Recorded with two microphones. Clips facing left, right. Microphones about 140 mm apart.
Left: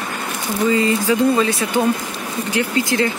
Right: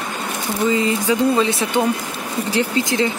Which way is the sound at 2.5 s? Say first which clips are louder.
Left 1 dB; 25° right (ahead or behind).